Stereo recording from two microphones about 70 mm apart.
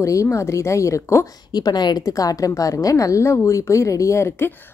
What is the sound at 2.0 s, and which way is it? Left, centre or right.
A woman's voice, left.